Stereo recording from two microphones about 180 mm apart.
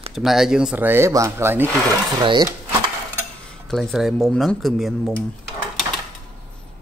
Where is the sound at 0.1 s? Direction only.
Centre (ahead or behind); by 2.5 s 20° right (ahead or behind).